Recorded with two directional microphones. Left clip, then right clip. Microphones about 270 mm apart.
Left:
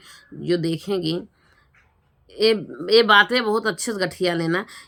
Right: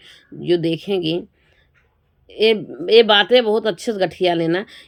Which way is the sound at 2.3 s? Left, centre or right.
Centre.